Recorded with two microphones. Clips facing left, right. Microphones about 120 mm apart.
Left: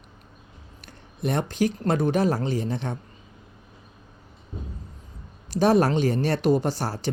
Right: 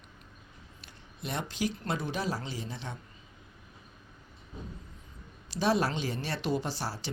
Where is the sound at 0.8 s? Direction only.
55° left (ahead or behind).